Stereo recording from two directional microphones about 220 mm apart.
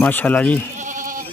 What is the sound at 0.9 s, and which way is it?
Goat, 35° right (ahead or behind).